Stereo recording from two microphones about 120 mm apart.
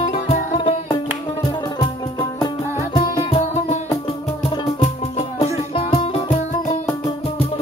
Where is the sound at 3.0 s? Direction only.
60° left (ahead or behind).